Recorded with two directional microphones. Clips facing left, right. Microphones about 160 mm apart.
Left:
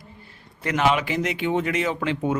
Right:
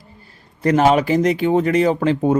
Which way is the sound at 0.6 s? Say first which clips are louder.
Right 7 dB; 40° right (ahead or behind).